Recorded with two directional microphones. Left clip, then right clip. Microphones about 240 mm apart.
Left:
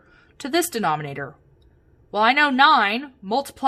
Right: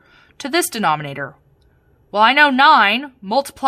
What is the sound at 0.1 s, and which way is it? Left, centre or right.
A woman's voice, centre.